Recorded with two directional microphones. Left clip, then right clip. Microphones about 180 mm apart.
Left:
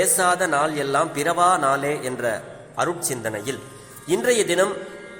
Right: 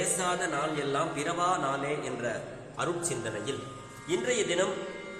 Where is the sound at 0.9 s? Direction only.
50° left (ahead or behind).